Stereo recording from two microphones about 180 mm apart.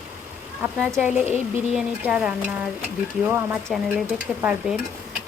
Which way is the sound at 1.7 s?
5° right (ahead or behind).